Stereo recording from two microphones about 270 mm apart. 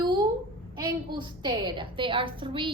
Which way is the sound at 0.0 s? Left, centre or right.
Centre.